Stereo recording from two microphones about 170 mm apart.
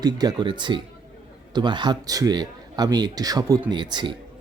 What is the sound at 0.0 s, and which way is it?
A man's voice, 25° right (ahead or behind).